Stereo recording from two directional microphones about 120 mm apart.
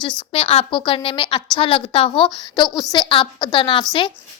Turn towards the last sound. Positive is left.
turn(degrees=45)  # may be behind; listen again after turning